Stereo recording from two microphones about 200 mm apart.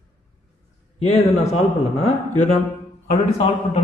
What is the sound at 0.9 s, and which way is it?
A man's voice, 35° left (ahead or behind).